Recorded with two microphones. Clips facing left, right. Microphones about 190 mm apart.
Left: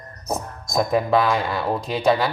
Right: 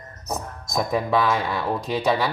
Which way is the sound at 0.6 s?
Centre (ahead or behind).